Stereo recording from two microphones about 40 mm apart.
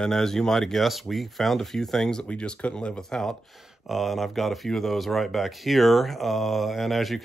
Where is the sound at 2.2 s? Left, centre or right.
Left.